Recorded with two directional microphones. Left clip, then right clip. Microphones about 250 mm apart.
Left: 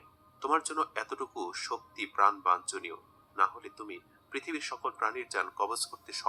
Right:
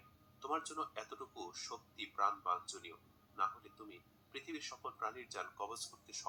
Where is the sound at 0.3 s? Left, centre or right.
Left.